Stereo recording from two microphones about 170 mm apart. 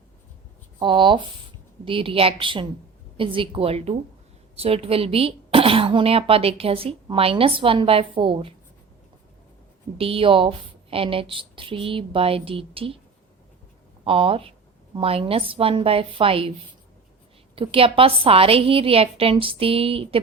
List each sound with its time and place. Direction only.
0.8 s speech: 30° right (ahead or behind)
10.0 s speech: 35° right (ahead or behind)
14.0 s speech: 30° right (ahead or behind)
17.5 s speech: 30° right (ahead or behind)